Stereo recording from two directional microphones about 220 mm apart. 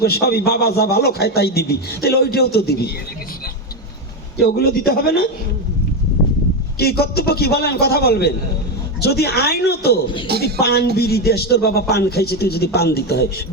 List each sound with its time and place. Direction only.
0.0 s a man's voice: 45° left (ahead or behind)
4.4 s a man's voice: 45° left (ahead or behind)
6.7 s a man's voice: 45° left (ahead or behind)